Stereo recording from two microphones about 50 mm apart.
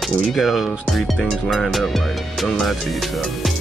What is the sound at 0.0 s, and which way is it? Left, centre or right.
Speech, centre.